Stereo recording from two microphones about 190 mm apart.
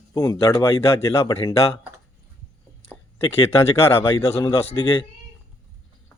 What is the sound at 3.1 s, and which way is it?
Speech, 30° left (ahead or behind).